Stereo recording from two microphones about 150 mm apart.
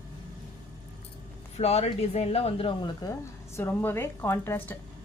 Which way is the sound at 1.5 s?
45° left (ahead or behind).